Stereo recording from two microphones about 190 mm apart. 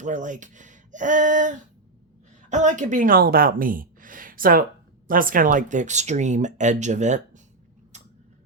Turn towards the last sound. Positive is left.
turn(degrees=-40)  # may be behind; listen again after turning